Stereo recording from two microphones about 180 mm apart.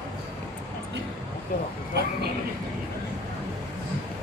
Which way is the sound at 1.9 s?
65° right (ahead or behind).